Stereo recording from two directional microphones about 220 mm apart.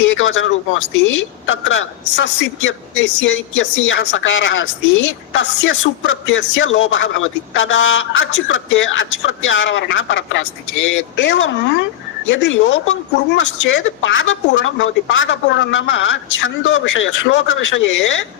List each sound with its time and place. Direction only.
0.2 s a woman's voice: 60° left (ahead or behind)